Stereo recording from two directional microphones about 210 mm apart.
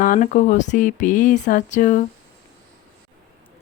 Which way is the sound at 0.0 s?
35° left (ahead or behind).